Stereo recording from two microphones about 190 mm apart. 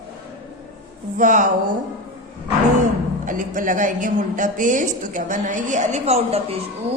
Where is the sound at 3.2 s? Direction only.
45° right (ahead or behind).